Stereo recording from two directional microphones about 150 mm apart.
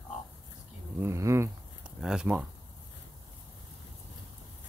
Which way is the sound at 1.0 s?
20° right (ahead or behind).